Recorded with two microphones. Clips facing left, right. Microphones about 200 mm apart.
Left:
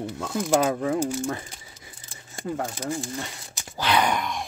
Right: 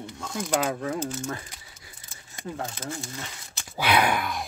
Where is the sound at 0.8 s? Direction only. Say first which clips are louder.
Left 5 dB; 15° left (ahead or behind).